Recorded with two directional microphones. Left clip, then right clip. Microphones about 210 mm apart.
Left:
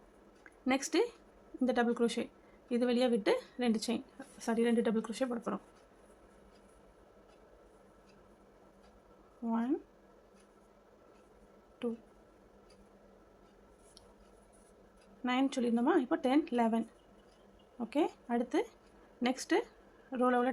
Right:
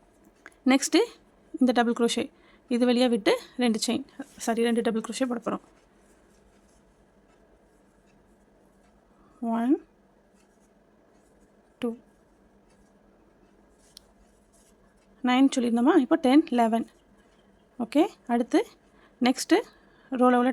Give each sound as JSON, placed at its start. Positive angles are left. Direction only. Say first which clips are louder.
{"t": 0.4, "sound": "a woman's voice", "louder": "right 10 dB", "side_deg": -55}
{"t": 9.4, "sound": "a sound", "louder": "right 9 dB", "side_deg": -55}
{"t": 11.8, "sound": "speech", "louder": "right 7 dB", "side_deg": -55}
{"t": 15.2, "sound": "a woman's voice", "louder": "right 10 dB", "side_deg": -55}